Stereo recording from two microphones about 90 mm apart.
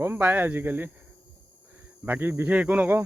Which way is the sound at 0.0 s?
20° right (ahead or behind).